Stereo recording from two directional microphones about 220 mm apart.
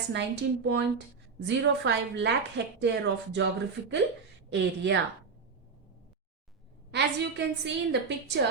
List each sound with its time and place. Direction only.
0.1 s a woman's voice: 50° right (ahead or behind)
6.9 s a woman's voice: 50° right (ahead or behind)